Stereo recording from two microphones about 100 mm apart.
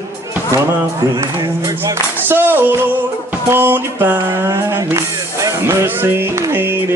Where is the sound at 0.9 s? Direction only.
45° right (ahead or behind).